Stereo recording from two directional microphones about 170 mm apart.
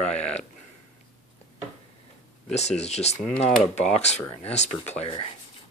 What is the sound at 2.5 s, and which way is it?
Speech, 40° left (ahead or behind).